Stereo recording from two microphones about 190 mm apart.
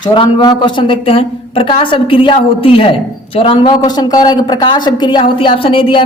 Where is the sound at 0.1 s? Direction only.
25° left (ahead or behind).